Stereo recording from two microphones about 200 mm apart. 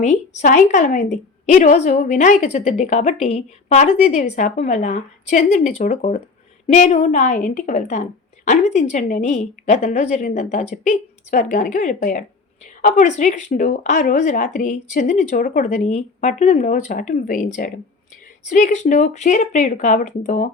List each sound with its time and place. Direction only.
0.0 s a woman's voice: 35° left (ahead or behind)